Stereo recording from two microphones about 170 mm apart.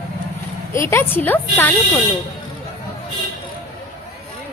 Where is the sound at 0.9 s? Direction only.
15° left (ahead or behind).